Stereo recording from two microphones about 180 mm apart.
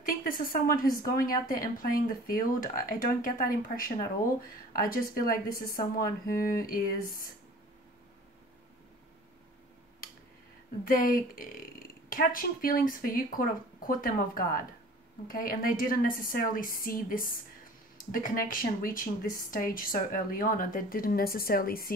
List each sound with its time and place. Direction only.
0.0 s a woman's voice: 55° left (ahead or behind)
10.9 s a woman's voice: 50° left (ahead or behind)